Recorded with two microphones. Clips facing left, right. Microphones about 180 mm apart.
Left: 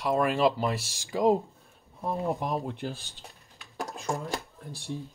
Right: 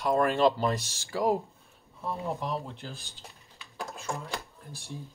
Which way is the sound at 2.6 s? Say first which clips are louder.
Left 7 dB; 60° left (ahead or behind).